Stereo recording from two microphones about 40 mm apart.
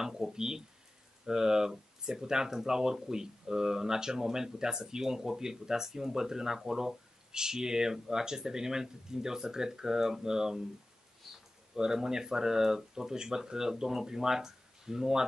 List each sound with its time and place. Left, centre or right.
0.0 s speech: centre
11.3 s a sound: centre
11.7 s speech: centre